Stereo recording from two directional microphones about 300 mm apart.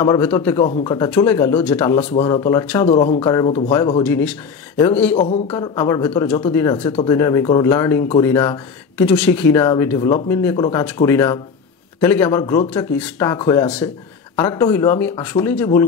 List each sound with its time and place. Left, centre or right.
0.0 s speech: centre
0.7 s speech: centre
2.0 s speech: centre
2.9 s speech: centre
5.1 s speech: left
5.5 s speech: centre